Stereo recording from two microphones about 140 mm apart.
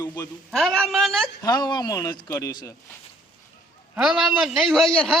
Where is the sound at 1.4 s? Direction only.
30° left (ahead or behind).